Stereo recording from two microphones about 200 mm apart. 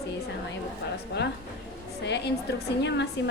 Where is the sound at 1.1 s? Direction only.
55° left (ahead or behind).